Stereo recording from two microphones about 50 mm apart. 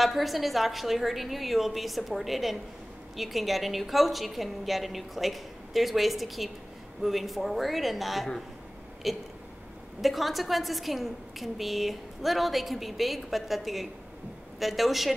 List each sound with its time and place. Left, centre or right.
0.0 s a woman's voice: centre